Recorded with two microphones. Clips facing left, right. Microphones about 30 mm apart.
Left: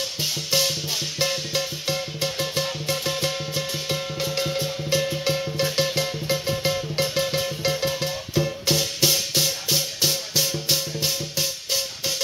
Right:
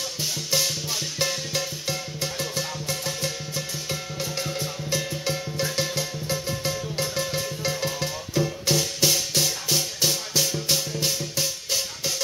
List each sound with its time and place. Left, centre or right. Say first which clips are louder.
0.2 s music: left 2 dB; centre